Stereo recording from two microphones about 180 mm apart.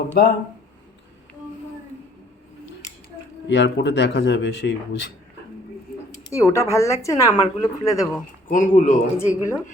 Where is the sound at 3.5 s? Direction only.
80° left.